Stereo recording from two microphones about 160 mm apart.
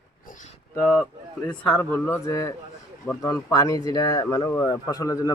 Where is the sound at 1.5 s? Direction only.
15° left (ahead or behind).